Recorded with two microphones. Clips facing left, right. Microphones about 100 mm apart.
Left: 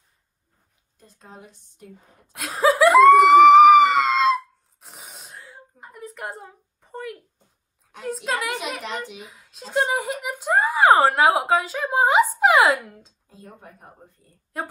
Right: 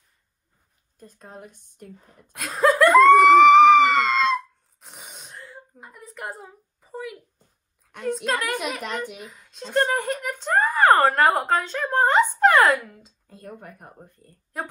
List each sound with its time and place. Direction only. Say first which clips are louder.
0.9 s a woman's voice: right 3 dB; 45° right (ahead or behind)
2.3 s laughter: even; centre (ahead or behind)
8.0 s speech: right 1 dB; centre (ahead or behind)
13.3 s speech: right 4 dB; 55° right (ahead or behind)
14.5 s speech: left 1 dB; centre (ahead or behind)